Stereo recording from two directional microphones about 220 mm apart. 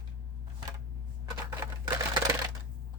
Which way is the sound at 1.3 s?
15° right (ahead or behind).